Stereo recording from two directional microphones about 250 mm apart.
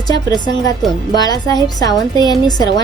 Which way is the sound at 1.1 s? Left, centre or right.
Centre.